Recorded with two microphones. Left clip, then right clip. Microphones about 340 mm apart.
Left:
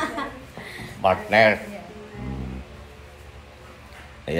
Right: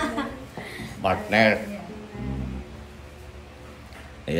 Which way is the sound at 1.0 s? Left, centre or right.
Centre.